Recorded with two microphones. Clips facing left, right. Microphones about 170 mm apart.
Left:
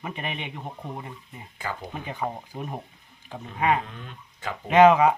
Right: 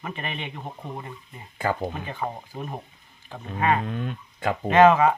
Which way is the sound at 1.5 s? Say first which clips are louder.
Right 8 dB; 50° right (ahead or behind).